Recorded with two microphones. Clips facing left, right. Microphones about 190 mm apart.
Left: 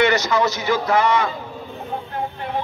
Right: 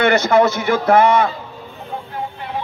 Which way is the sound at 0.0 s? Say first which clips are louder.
Right 4 dB; 55° right (ahead or behind).